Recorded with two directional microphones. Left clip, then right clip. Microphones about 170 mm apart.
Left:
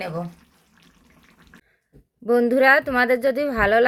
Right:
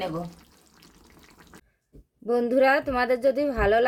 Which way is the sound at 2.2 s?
25° left (ahead or behind).